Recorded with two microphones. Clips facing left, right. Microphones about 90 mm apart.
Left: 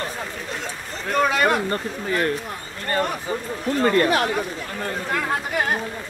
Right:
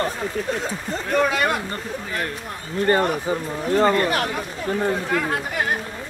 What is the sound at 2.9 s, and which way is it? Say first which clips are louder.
Speech: right 4 dB; 20° right (ahead or behind).